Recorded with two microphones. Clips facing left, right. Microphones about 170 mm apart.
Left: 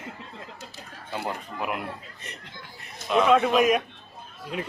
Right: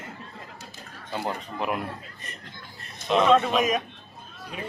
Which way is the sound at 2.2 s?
80° left.